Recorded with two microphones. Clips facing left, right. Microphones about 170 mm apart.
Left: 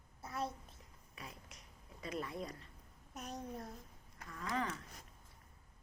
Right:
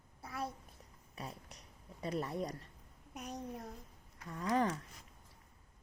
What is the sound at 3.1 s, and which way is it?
Speech, 15° right (ahead or behind).